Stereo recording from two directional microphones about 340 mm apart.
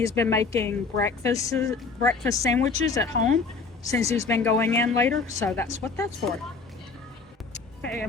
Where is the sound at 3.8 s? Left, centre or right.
Centre.